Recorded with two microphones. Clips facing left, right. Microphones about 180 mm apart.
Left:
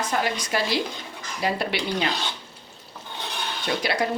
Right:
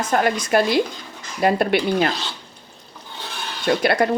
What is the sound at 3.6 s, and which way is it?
Speech, 55° right (ahead or behind).